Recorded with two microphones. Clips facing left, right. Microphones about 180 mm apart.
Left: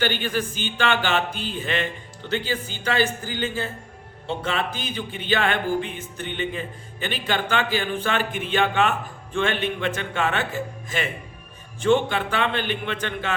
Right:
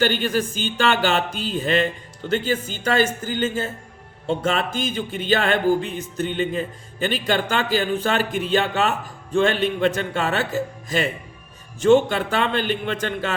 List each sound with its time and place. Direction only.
0.0 s music: 45° right (ahead or behind)
4.3 s speech: 45° right (ahead or behind)